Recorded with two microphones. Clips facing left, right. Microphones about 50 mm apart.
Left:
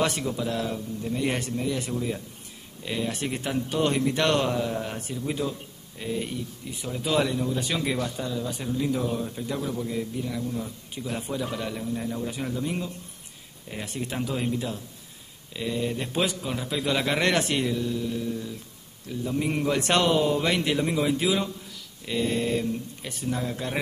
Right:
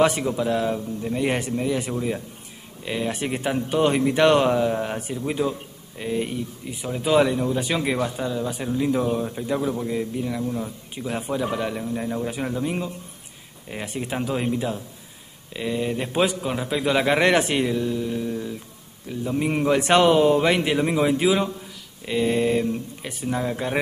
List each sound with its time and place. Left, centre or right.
0.0 s a man's voice: centre